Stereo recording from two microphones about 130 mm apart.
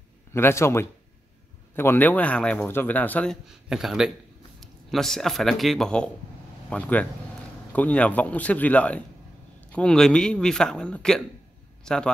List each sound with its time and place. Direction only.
0.3 s a man's voice: 20° left (ahead or behind)
3.6 s a man's voice: 5° right (ahead or behind)